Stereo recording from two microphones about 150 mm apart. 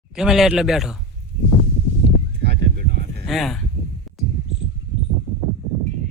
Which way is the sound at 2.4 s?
90° right.